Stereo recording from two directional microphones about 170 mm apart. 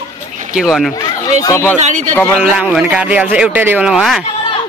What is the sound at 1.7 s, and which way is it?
Speech, 45° right (ahead or behind).